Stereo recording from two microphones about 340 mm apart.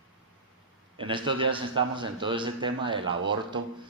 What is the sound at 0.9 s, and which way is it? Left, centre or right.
A man's voice, centre.